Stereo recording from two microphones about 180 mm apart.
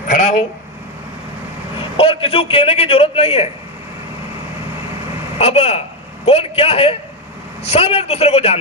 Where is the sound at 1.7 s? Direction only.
30° left (ahead or behind).